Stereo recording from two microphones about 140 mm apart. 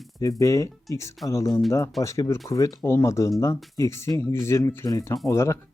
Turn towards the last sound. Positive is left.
turn(degrees=20)  # may be behind; listen again after turning